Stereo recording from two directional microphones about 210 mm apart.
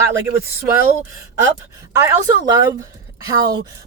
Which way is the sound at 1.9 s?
15° right (ahead or behind).